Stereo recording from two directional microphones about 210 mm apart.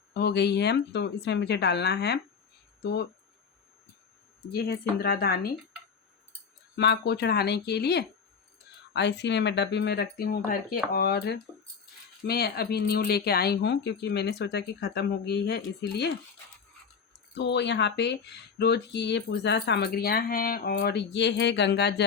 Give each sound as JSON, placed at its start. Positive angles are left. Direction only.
{"t": 0.1, "sound": "speech", "side_deg": 50}
{"t": 4.5, "sound": "speech", "side_deg": 50}
{"t": 6.7, "sound": "speech", "side_deg": 55}
{"t": 17.3, "sound": "speech", "side_deg": 55}